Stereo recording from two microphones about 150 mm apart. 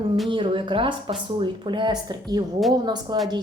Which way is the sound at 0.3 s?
35° right (ahead or behind).